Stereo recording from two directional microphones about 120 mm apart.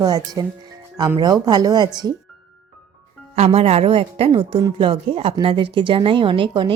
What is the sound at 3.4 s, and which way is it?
Speech, 55° right (ahead or behind).